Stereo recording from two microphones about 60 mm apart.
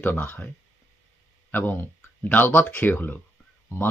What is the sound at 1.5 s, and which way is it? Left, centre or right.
Speech, left.